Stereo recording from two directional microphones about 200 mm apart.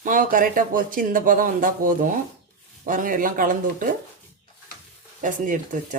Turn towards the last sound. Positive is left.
turn(degrees=-40)  # may be behind; listen again after turning